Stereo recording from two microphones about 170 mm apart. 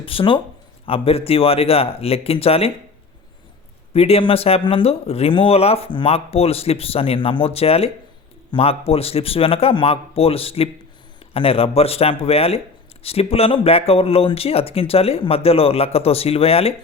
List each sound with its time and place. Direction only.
0.0 s speech: 30° left (ahead or behind)
3.9 s speech: 35° left (ahead or behind)